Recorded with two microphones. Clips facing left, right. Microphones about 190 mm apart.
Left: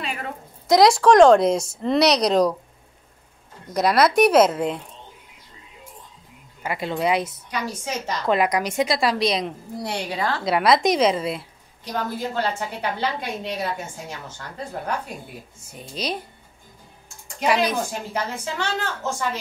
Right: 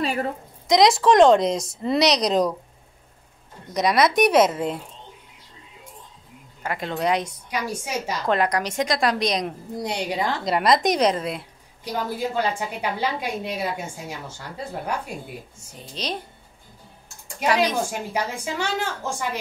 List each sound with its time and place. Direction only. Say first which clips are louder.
0.0 s a sound: right 7 dB; 40° right (ahead or behind)
0.7 s speech: left 2 dB; centre (ahead or behind)
3.7 s speech: left 2 dB; centre (ahead or behind)
6.6 s speech: left 1 dB; 10° left (ahead or behind)
7.5 s a woman's voice: right 1 dB; 10° right (ahead or behind)
8.3 s speech: left 2 dB; 10° left (ahead or behind)
9.8 s a woman's voice: even; 15° right (ahead or behind)
10.4 s speech: left 2 dB; centre (ahead or behind)
11.8 s a woman's voice: right 1 dB; 10° right (ahead or behind)
15.9 s speech: left 2 dB; 10° left (ahead or behind)
17.9 s a woman's voice: right 1 dB; 10° right (ahead or behind)